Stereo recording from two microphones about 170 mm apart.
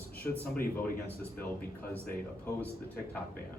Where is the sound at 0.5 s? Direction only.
60° left (ahead or behind).